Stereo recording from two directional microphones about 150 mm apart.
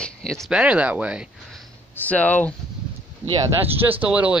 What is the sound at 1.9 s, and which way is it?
Speech, 10° left (ahead or behind).